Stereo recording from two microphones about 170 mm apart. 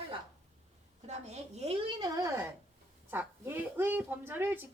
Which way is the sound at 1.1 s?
40° right (ahead or behind).